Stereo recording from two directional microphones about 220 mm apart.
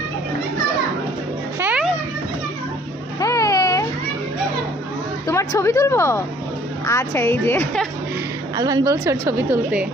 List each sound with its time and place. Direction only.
1.5 s children playing: 5° right (ahead or behind)
3.2 s baby cry: 15° left (ahead or behind)
5.3 s a woman's voice: 15° left (ahead or behind)
8.5 s a woman's voice: 15° right (ahead or behind)